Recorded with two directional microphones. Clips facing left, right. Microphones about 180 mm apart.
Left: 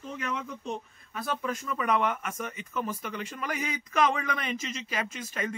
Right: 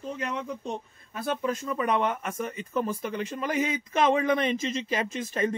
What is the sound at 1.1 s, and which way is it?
A man's voice, 30° right (ahead or behind).